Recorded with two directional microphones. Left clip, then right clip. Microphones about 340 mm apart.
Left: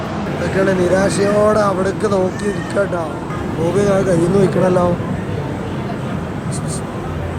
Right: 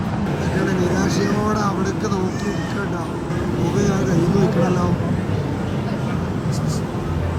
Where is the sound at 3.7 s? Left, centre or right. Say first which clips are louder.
Left 8 dB; centre.